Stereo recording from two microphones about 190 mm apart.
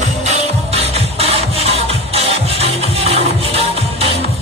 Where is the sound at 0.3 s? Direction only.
30° right (ahead or behind).